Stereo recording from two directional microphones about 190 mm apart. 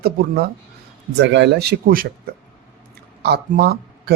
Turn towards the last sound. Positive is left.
turn(degrees=-55)  # may be behind; listen again after turning